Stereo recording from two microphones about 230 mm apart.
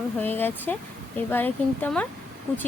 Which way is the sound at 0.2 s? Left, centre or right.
Centre.